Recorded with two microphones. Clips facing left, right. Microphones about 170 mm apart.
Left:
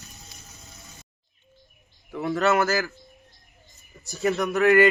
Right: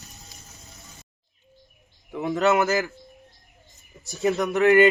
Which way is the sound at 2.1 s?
15° right (ahead or behind).